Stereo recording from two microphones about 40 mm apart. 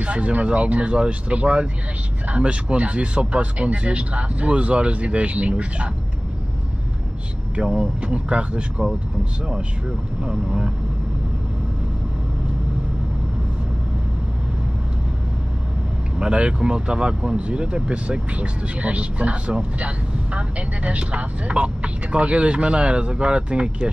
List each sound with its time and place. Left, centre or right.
0.0 s speech: right
7.5 s speech: right
10.2 s speech: right
16.2 s speech: right